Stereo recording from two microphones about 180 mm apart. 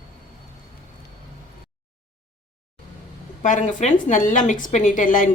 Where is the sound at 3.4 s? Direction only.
40° left (ahead or behind).